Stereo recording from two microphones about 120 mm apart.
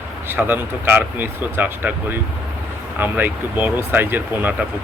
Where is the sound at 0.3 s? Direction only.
15° right (ahead or behind).